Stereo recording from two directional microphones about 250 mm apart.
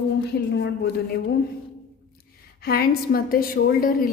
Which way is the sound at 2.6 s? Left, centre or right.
Left.